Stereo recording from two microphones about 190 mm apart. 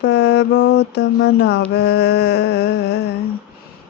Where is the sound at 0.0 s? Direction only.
65° left (ahead or behind).